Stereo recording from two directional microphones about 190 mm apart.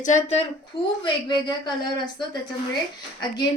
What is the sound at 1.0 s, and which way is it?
Speech, 20° left (ahead or behind).